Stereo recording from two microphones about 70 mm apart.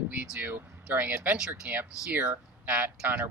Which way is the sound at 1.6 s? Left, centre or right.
Right.